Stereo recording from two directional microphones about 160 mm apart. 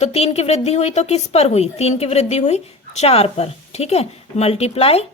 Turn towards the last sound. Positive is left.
turn(degrees=40)  # may be behind; listen again after turning